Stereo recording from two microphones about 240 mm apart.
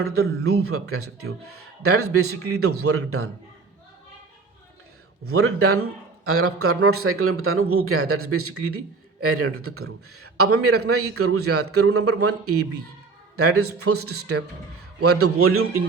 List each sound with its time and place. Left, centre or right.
0.6 s a man's voice: right
5.2 s a man's voice: right